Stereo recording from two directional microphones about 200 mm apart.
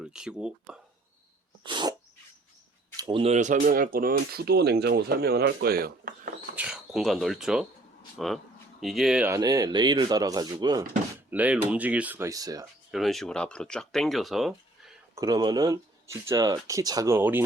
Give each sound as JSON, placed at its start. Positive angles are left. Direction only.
{"t": 0.0, "sound": "speech", "side_deg": -5}
{"t": 1.6, "sound": "sneeze", "side_deg": -20}
{"t": 3.0, "sound": "speech", "side_deg": -25}
{"t": 6.6, "sound": "speech", "side_deg": -5}
{"t": 9.3, "sound": "speech", "side_deg": -20}
{"t": 11.3, "sound": "speech", "side_deg": -5}
{"t": 12.9, "sound": "speech", "side_deg": 0}
{"t": 15.1, "sound": "speech", "side_deg": -20}